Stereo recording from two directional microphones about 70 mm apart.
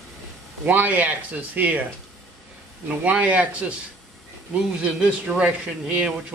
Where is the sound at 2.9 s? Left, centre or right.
Centre.